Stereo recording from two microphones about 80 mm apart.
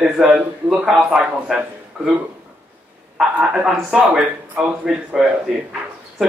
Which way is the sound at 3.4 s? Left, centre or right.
Centre.